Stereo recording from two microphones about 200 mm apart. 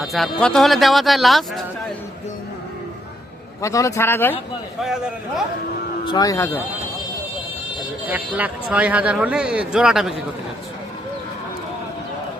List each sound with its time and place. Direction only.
0.0 s speech: centre (ahead or behind)
3.6 s speech: 15° left (ahead or behind)
4.8 s speech: centre (ahead or behind)
6.1 s speech: 20° left (ahead or behind)
8.0 s speech: 5° right (ahead or behind)